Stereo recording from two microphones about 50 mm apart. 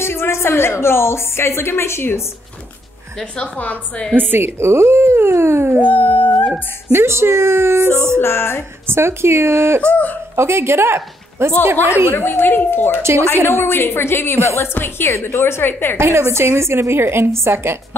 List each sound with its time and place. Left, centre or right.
0.0 s a woman's voice: left
3.5 s a woman's voice: left
4.2 s a woman's voice: right
5.9 s howl: left
6.9 s a woman's voice: right
8.2 s a woman's voice: left
8.8 s a woman's voice: right
9.8 s a woman's voice: left
10.3 s speech: right
12.1 s a woman's voice: left
13.0 s a woman's voice: right
13.5 s a woman's voice: left
16.0 s a woman's voice: right